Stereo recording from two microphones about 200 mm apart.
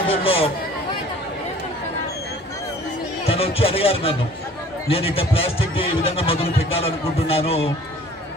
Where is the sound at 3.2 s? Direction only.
30° left (ahead or behind).